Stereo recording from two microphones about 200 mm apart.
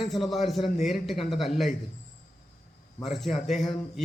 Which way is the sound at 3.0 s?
Centre (ahead or behind).